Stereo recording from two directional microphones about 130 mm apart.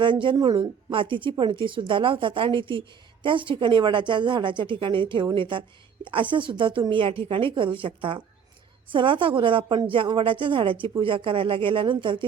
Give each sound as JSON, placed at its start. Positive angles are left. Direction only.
{"t": 0.0, "sound": "speech", "side_deg": -40}